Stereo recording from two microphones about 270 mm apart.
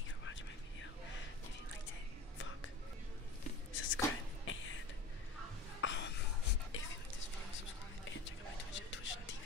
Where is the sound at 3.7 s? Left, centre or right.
Left.